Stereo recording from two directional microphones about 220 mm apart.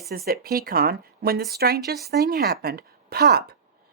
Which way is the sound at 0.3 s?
45° right (ahead or behind).